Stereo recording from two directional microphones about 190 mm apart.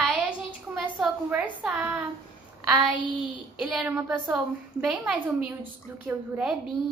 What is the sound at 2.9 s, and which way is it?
Speech, 25° left (ahead or behind).